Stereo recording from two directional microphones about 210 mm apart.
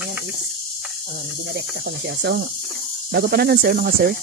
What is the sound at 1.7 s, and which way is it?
Speech, 50° right (ahead or behind).